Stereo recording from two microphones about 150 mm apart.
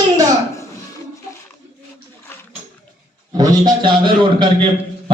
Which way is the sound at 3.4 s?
25° right (ahead or behind).